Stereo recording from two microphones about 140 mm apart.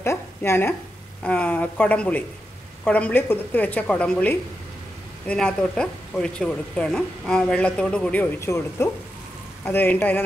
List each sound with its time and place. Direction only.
0.0 s a woman's voice: 20° left (ahead or behind)